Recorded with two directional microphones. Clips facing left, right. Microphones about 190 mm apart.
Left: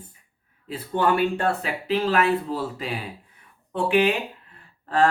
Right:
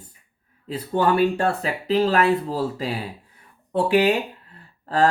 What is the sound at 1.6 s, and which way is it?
Speech, 35° right (ahead or behind).